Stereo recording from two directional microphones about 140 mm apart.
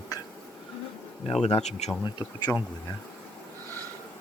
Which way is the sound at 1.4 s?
50° left (ahead or behind).